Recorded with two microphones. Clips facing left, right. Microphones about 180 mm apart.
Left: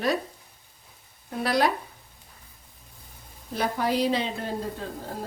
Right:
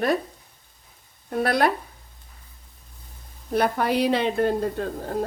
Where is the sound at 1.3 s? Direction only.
55° right (ahead or behind).